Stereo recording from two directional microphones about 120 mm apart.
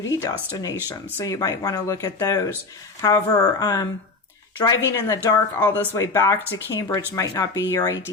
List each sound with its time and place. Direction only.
0.3 s speech: 30° left (ahead or behind)